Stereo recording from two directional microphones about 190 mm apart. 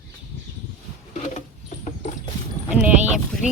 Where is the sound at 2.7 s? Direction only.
5° right (ahead or behind).